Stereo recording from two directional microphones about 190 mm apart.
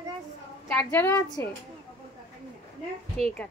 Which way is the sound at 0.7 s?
10° left (ahead or behind).